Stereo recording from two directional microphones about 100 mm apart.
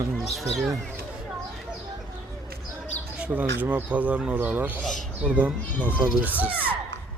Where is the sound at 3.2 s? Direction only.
15° right (ahead or behind).